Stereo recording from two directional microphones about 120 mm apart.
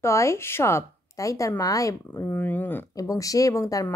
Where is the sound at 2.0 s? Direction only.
20° left (ahead or behind).